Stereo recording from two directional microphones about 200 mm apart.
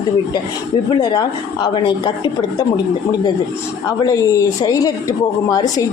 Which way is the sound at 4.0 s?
15° left (ahead or behind).